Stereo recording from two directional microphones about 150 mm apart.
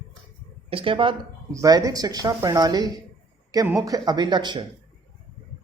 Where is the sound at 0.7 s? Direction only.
35° right (ahead or behind).